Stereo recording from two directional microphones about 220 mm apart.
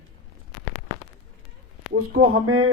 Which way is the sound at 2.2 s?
70° right (ahead or behind).